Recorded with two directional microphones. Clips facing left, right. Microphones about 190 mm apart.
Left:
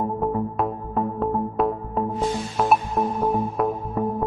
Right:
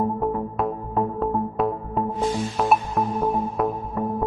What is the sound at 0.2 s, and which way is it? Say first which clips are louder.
Music: left 1 dB; centre (ahead or behind).